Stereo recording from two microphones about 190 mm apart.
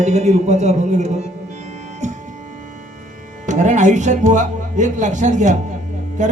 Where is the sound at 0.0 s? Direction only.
35° right (ahead or behind).